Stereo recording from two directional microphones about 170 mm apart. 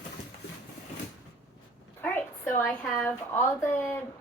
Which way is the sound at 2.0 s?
10° left (ahead or behind).